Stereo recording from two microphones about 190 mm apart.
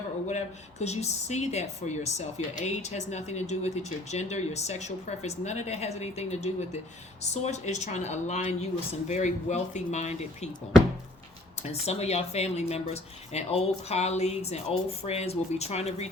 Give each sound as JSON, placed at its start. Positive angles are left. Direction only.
{"t": 0.3, "sound": "speech", "side_deg": 35}
{"t": 11.6, "sound": "speech", "side_deg": 35}